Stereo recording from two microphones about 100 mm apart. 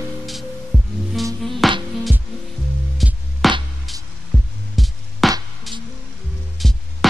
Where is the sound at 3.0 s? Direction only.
5° right (ahead or behind).